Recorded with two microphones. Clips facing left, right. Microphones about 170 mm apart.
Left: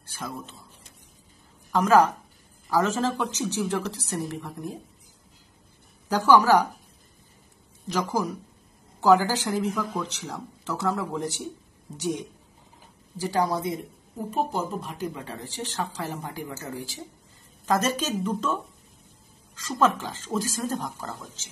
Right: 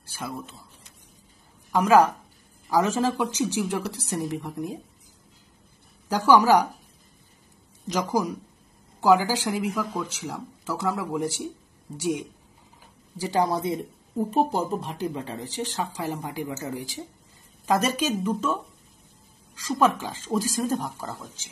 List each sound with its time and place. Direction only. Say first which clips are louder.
0.1 s a man's voice: right 1 dB; 10° right (ahead or behind)
1.7 s speech: right 1 dB; 15° right (ahead or behind)
6.0 s speech: right 1 dB; 10° right (ahead or behind)
7.8 s speech: right 1 dB; 15° right (ahead or behind)
13.2 s speech: right 1 dB; 25° right (ahead or behind)
14.3 s speech: right 3 dB; 35° right (ahead or behind)
15.3 s speech: right 2 dB; 15° right (ahead or behind)